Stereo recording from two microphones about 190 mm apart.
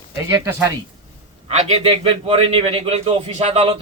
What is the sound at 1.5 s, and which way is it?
A man's voice, 35° right (ahead or behind).